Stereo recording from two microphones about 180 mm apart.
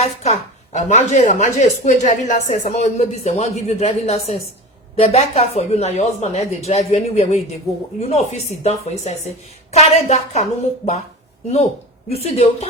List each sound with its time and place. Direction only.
0.0 s speech: 40° left (ahead or behind)
12.0 s speech: 35° left (ahead or behind)